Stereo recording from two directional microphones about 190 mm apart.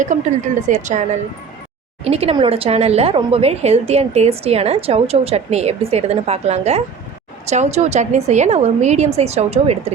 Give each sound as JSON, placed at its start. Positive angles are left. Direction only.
{"t": 0.1, "sound": "a woman's voice", "side_deg": -40}